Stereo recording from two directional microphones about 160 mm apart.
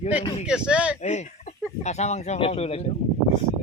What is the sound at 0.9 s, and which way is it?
Speech, 45° left (ahead or behind).